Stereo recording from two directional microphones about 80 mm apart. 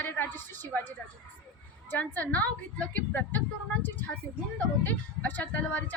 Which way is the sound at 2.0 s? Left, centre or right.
Centre.